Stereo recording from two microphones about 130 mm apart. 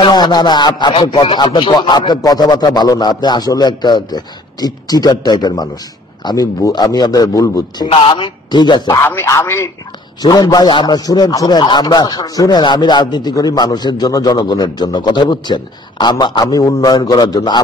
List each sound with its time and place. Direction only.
0.0 s a man's voice: 35° left (ahead or behind)
7.9 s a man's voice: 45° left (ahead or behind)
9.0 s a man's voice: 20° left (ahead or behind)